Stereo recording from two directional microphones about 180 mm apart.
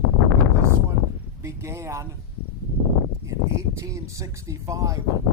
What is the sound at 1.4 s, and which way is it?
Speech, 15° right (ahead or behind).